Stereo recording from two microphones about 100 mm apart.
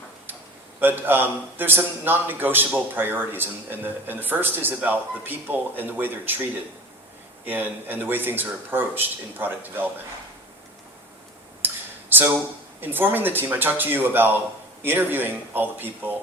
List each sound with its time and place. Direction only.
0.8 s a man's voice: 20° right (ahead or behind)
7.4 s a man's voice: 20° right (ahead or behind)
11.6 s a sound: 20° right (ahead or behind)
12.8 s a man's voice: 20° right (ahead or behind)